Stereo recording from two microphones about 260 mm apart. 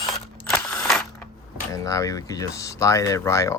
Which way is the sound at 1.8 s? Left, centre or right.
Centre.